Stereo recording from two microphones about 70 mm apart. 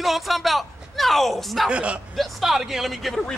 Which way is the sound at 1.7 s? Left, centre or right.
Centre.